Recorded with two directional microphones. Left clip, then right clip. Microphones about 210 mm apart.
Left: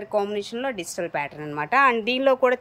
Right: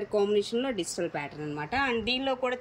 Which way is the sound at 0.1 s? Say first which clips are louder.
Left 1 dB; 5° left (ahead or behind).